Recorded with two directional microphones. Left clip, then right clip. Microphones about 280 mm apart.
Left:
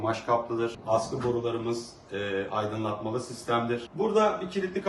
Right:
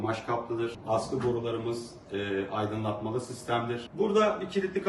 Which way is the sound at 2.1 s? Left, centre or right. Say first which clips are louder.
Left 2 dB; centre.